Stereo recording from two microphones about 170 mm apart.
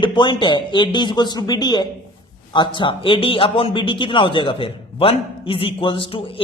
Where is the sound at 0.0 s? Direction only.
25° left (ahead or behind).